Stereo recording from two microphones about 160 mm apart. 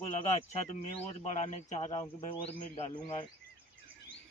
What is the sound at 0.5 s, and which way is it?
A man's voice, 45° left (ahead or behind).